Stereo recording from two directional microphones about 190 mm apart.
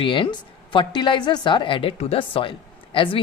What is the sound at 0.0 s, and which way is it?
Speech, 25° left (ahead or behind).